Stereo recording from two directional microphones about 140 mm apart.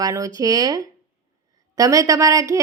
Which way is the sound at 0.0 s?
25° right (ahead or behind).